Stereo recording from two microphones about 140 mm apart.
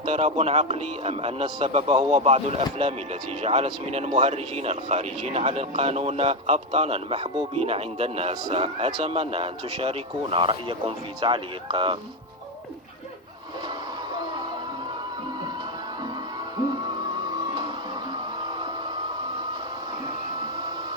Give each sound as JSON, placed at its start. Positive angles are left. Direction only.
{"t": 0.0, "sound": "speech", "side_deg": -50}
{"t": 17.0, "sound": "music", "side_deg": -30}